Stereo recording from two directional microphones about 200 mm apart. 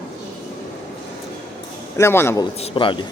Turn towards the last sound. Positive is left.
turn(degrees=25)  # may be behind; listen again after turning